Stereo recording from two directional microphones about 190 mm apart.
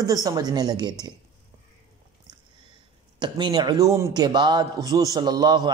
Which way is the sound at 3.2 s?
25° right (ahead or behind).